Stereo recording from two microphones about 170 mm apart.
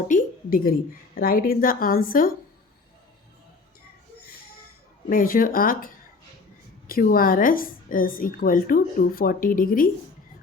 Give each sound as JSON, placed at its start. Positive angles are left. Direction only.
{"t": 0.1, "sound": "a sound", "side_deg": 55}
{"t": 1.1, "sound": "a woman's voice", "side_deg": 60}
{"t": 5.0, "sound": "a woman's voice", "side_deg": 55}